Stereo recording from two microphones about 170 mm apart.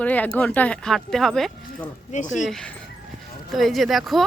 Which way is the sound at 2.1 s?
45° left (ahead or behind).